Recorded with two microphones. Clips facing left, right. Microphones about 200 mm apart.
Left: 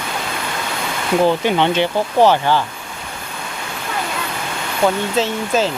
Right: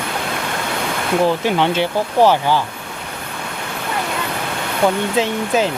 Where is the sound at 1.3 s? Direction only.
5° right (ahead or behind).